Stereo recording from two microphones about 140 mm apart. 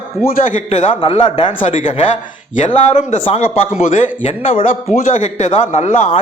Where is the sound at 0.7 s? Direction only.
60° left (ahead or behind).